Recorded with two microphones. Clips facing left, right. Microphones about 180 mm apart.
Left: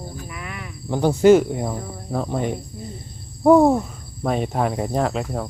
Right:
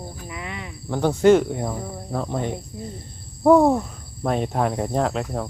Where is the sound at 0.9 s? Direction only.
10° left (ahead or behind).